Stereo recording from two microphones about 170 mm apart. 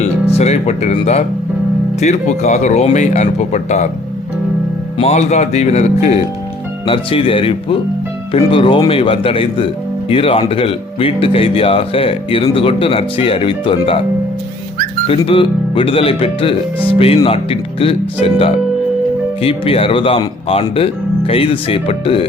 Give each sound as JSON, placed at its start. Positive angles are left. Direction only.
{"t": 0.0, "sound": "speech", "side_deg": 40}
{"t": 4.9, "sound": "speech", "side_deg": 40}
{"t": 15.1, "sound": "speech", "side_deg": 30}